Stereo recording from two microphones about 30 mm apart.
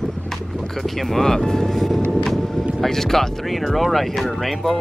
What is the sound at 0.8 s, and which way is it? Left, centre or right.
Music, centre.